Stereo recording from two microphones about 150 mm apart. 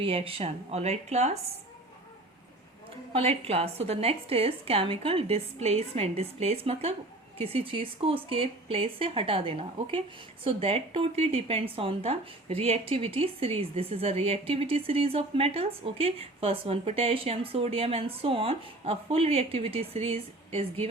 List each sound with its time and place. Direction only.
0.0 s speech: 40° right (ahead or behind)
3.1 s speech: 40° right (ahead or behind)